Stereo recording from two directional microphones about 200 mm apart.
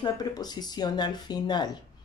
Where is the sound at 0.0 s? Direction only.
20° left (ahead or behind).